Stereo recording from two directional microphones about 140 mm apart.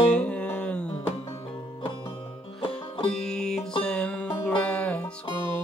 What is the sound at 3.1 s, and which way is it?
Music, 5° left (ahead or behind).